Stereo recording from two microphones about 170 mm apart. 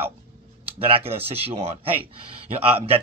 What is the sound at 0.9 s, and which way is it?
Speech, 35° right (ahead or behind).